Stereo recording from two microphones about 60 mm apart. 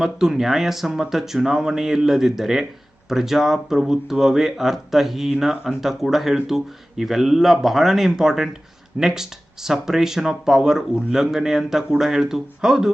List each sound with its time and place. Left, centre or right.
0.0 s speech: centre